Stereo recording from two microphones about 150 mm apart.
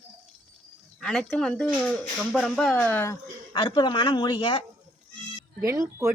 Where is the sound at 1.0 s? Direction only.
Centre (ahead or behind).